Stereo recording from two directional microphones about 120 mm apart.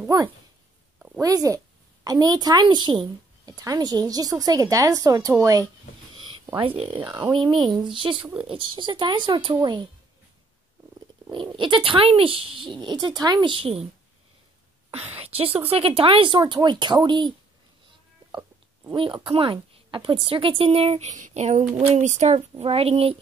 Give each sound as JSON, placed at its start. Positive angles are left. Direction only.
{"t": 0.1, "sound": "a woman's voice", "side_deg": -30}
{"t": 0.9, "sound": "a sound", "side_deg": -5}
{"t": 1.2, "sound": "a woman's voice", "side_deg": -30}
{"t": 6.5, "sound": "a woman's voice", "side_deg": -50}
{"t": 7.3, "sound": "a woman's voice", "side_deg": -40}
{"t": 11.3, "sound": "a woman's voice", "side_deg": -40}
{"t": 14.9, "sound": "a woman's voice", "side_deg": -60}
{"t": 18.9, "sound": "a woman's voice", "side_deg": -45}
{"t": 21.9, "sound": "a sound", "side_deg": -80}